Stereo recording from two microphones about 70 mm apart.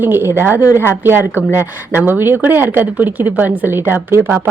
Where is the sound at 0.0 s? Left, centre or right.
Right.